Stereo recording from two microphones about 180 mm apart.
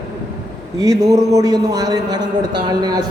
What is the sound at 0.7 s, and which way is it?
A man's voice, 20° right (ahead or behind).